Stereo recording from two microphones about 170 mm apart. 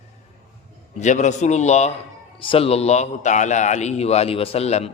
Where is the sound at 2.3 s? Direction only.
30° left (ahead or behind).